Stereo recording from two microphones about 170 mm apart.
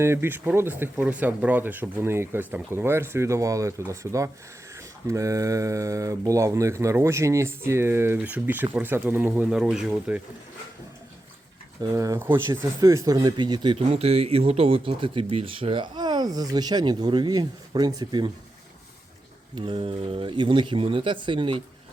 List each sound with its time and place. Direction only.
0.0 s speech: 15° right (ahead or behind)
11.8 s speech: 20° right (ahead or behind)
19.5 s speech: 30° right (ahead or behind)